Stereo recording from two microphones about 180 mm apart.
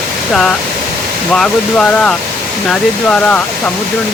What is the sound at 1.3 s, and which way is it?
Speech, 5° left (ahead or behind).